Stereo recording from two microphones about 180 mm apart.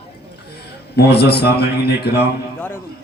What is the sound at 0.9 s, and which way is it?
Speech, 65° left (ahead or behind).